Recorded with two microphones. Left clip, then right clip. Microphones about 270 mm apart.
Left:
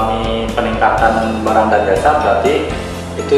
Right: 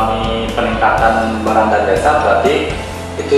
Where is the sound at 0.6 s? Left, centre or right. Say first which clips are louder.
Even; centre.